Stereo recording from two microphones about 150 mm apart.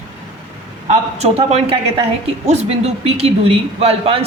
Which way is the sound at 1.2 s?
45° right (ahead or behind).